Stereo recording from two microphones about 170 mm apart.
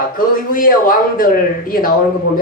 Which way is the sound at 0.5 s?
55° left (ahead or behind).